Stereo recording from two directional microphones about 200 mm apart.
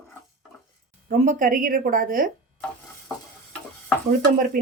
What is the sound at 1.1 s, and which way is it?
A woman's voice, 40° right (ahead or behind).